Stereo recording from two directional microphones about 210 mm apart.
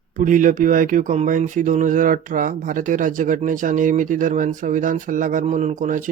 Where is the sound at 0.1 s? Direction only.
40° right (ahead or behind).